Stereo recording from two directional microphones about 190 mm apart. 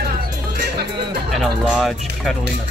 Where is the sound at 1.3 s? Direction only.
Centre (ahead or behind).